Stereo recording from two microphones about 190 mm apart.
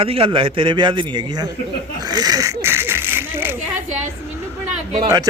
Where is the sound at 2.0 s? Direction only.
20° right (ahead or behind).